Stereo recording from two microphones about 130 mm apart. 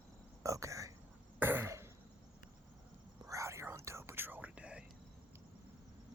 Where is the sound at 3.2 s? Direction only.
25° right (ahead or behind).